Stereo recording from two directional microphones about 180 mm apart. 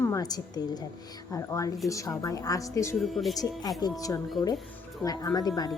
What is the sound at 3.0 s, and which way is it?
Speech, centre (ahead or behind).